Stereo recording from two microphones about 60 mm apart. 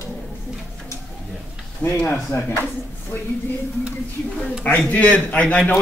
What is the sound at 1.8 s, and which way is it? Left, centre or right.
Speech, left.